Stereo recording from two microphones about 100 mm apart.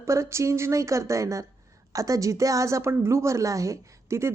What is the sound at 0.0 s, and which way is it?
A woman's voice, 30° right (ahead or behind).